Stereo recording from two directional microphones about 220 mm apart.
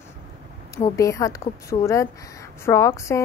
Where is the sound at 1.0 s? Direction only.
15° left (ahead or behind).